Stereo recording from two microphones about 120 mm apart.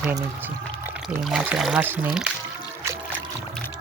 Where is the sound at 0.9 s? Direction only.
10° right (ahead or behind).